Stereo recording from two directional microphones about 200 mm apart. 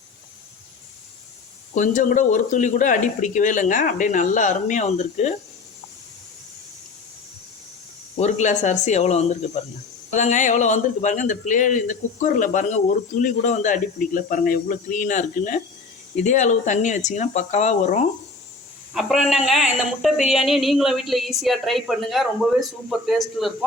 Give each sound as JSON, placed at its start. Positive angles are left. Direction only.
{"t": 1.7, "sound": "a man's voice", "side_deg": 40}
{"t": 8.1, "sound": "a man's voice", "side_deg": 35}
{"t": 18.9, "sound": "a woman's voice", "side_deg": 0}